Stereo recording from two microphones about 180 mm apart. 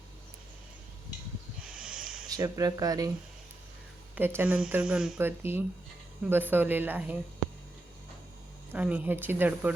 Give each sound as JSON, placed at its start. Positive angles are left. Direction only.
{"t": 1.6, "sound": "a sound", "side_deg": -5}
{"t": 2.3, "sound": "speech", "side_deg": -20}
{"t": 4.1, "sound": "speech", "side_deg": -10}
{"t": 8.7, "sound": "speech", "side_deg": -10}